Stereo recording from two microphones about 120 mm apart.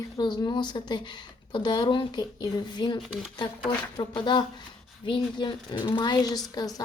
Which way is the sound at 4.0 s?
40° left (ahead or behind).